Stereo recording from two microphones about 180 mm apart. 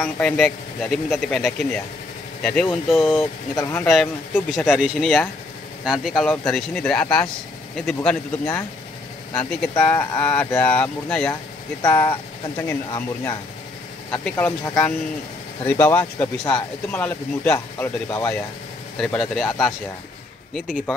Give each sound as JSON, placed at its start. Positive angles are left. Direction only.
{"t": 0.0, "sound": "speech", "side_deg": 0}
{"t": 3.8, "sound": "speech", "side_deg": 0}
{"t": 11.8, "sound": "speech", "side_deg": 15}
{"t": 15.6, "sound": "speech", "side_deg": 10}
{"t": 18.9, "sound": "speech", "side_deg": 0}
{"t": 20.5, "sound": "speech", "side_deg": -5}